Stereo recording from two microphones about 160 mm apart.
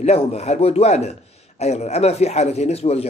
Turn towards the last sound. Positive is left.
turn(degrees=40)  # may be behind; listen again after turning